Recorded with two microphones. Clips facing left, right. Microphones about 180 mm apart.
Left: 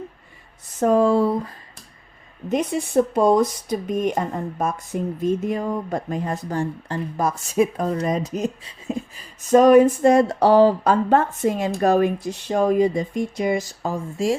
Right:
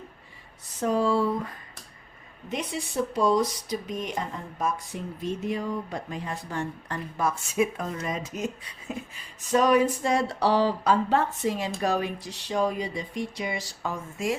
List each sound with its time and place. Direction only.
0.8 s speech: 50° left (ahead or behind)
2.5 s speech: 50° left (ahead or behind); by 9.2 s 30° left (ahead or behind)
9.4 s speech: 45° left (ahead or behind)